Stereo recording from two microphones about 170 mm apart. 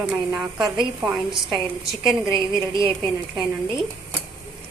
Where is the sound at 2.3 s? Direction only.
30° right (ahead or behind).